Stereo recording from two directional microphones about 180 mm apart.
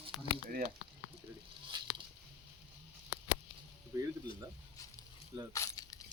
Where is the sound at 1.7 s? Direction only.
25° right (ahead or behind).